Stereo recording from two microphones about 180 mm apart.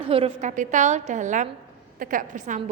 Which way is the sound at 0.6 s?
45° right (ahead or behind).